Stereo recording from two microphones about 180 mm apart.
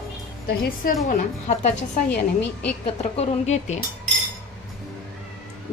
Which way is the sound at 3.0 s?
40° left (ahead or behind).